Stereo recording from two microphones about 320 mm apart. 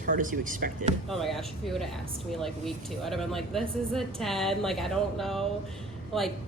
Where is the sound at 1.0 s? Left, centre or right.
Centre.